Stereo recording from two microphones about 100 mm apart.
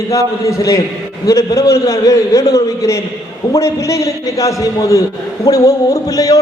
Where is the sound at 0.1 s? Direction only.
30° left (ahead or behind).